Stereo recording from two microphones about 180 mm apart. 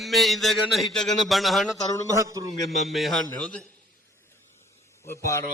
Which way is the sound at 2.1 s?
15° right (ahead or behind).